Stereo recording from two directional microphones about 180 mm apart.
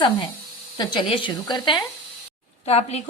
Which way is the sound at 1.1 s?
25° left (ahead or behind).